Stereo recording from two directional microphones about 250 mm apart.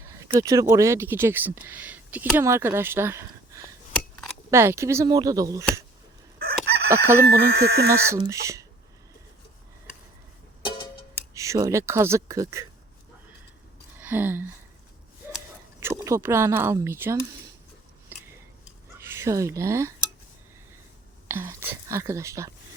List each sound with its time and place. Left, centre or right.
0.0 s speech: centre
6.8 s crowing: centre
7.3 s speech: right
7.9 s speech: centre
10.6 s music: centre
11.3 s speech: centre
14.0 s a sound: centre
15.8 s speech: centre
18.1 s a sound: centre
18.9 s speech: centre
21.2 s speech: centre